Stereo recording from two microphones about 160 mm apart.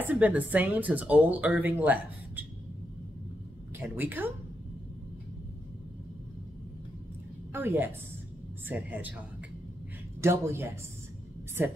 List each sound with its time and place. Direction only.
0.0 s speech: 10° right (ahead or behind)
3.8 s speech: 10° right (ahead or behind)
7.5 s speech: 15° right (ahead or behind)
10.2 s speech: 15° right (ahead or behind)